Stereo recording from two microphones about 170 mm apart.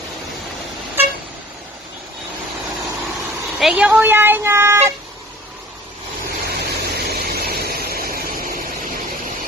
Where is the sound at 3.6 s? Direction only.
5° right (ahead or behind).